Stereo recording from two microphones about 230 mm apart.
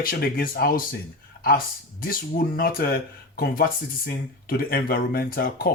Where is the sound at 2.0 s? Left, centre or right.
Left.